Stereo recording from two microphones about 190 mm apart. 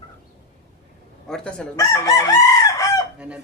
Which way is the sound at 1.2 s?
5° left (ahead or behind).